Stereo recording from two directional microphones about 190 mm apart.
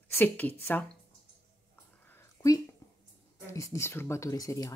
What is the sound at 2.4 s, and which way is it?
A woman's voice, 15° left (ahead or behind).